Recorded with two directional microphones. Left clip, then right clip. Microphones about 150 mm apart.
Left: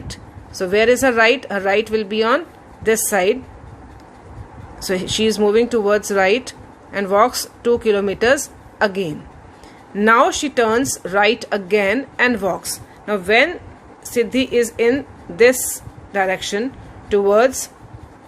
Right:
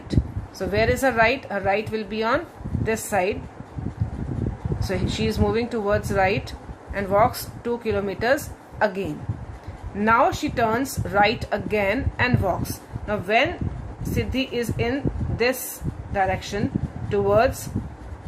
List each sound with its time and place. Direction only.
0.1 s speech: 50° left (ahead or behind)
4.8 s a woman's voice: 55° left (ahead or behind)